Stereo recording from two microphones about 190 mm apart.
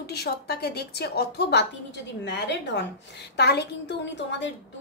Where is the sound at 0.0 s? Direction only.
60° left (ahead or behind).